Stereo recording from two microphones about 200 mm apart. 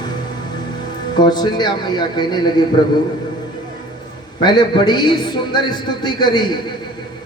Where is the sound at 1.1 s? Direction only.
20° left (ahead or behind).